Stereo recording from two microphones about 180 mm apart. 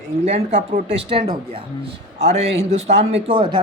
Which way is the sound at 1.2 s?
30° right (ahead or behind).